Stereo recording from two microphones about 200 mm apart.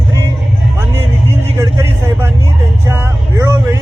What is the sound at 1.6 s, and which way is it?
Vehicle, 15° right (ahead or behind).